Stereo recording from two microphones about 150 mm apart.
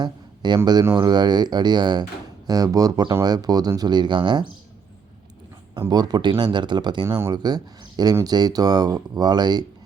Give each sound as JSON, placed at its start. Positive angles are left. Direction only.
{"t": 0.0, "sound": "speech", "side_deg": -30}
{"t": 5.9, "sound": "speech", "side_deg": -25}